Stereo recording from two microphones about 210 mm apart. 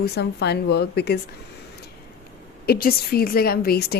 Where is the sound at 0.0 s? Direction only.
50° left (ahead or behind).